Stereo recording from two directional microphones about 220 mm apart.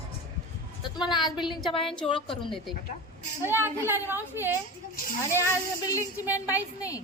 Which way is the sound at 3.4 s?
10° right (ahead or behind).